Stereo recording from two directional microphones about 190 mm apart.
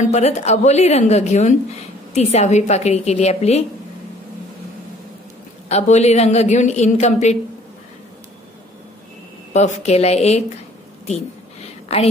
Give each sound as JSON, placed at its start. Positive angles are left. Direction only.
{"t": 0.0, "sound": "a woman's voice", "side_deg": 35}
{"t": 5.7, "sound": "a woman's voice", "side_deg": 35}
{"t": 9.5, "sound": "a woman's voice", "side_deg": 35}
{"t": 11.9, "sound": "a woman's voice", "side_deg": 35}